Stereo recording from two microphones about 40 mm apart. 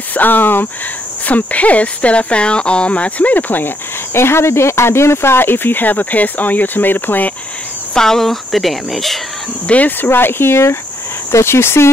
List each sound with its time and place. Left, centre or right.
0.1 s speech: left
1.2 s speech: left
4.1 s speech: left
7.9 s speech: centre
9.8 s speech: left